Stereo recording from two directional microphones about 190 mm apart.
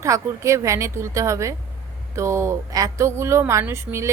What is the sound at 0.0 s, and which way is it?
A woman's voice, 15° right (ahead or behind).